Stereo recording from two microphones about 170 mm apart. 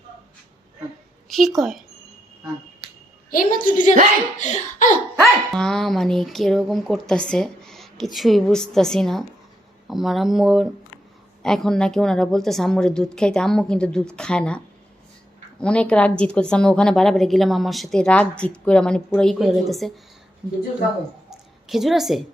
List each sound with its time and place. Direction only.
1.3 s a woman's voice: centre (ahead or behind)
3.2 s a woman's voice: 55° left (ahead or behind)
5.2 s a woman's voice: centre (ahead or behind)
15.6 s a woman's voice: 5° left (ahead or behind)
21.2 s a sound: centre (ahead or behind)